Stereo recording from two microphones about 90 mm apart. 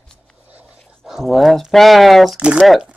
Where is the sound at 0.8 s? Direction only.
5° left (ahead or behind).